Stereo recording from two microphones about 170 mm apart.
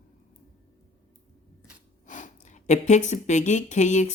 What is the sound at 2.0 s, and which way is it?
Speech, 50° left (ahead or behind).